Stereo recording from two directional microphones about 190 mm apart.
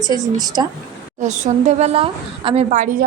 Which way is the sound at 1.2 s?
40° right (ahead or behind).